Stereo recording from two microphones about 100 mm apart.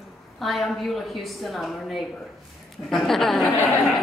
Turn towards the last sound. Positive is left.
turn(degrees=20)  # may be behind; listen again after turning